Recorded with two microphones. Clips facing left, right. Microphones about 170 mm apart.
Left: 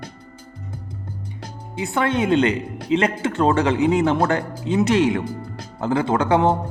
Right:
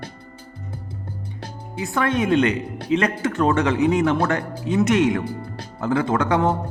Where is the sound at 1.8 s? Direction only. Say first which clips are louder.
Left 1 dB; 25° left (ahead or behind).